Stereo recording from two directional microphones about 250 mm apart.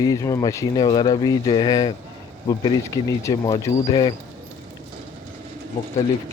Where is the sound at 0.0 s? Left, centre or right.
Centre.